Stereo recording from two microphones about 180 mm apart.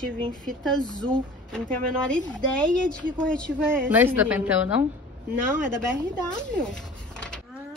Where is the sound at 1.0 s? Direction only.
5° left (ahead or behind).